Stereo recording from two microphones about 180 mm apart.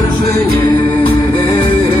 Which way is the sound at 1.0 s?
25° left (ahead or behind).